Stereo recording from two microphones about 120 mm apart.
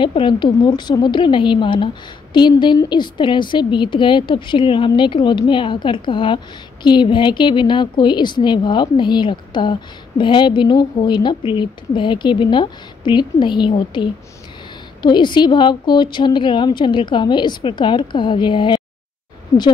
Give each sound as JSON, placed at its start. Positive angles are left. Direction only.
{"t": 0.0, "sound": "a woman's voice", "side_deg": 45}